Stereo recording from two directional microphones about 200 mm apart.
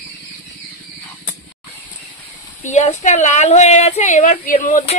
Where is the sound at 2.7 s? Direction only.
35° left (ahead or behind).